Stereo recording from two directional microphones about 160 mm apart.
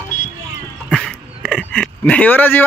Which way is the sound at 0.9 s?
5° left (ahead or behind).